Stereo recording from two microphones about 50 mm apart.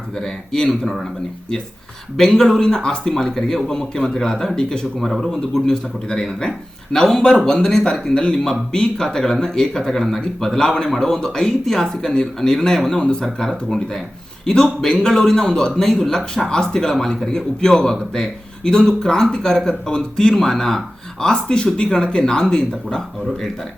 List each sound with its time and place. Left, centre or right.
0.2 s speech: centre
2.1 s speech: centre
4.9 s a man's voice: centre
9.0 s speech: centre